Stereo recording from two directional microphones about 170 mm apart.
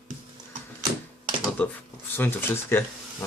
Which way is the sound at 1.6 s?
10° left (ahead or behind).